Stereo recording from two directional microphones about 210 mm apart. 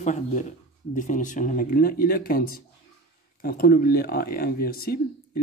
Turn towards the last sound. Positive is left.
turn(degrees=45)  # may be behind; listen again after turning